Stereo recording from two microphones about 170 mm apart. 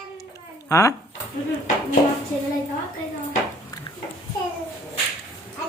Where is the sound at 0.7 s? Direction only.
20° left (ahead or behind).